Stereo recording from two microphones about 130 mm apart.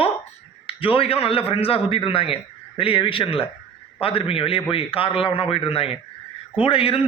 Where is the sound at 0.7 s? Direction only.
45° left (ahead or behind).